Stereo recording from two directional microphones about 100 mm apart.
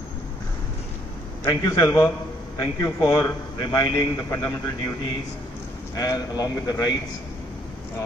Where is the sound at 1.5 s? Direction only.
35° left (ahead or behind).